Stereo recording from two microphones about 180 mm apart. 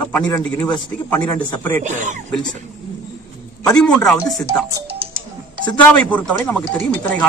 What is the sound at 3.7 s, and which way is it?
Speech, 5° left (ahead or behind).